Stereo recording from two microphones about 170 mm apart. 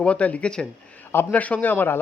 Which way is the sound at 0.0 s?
5° left (ahead or behind).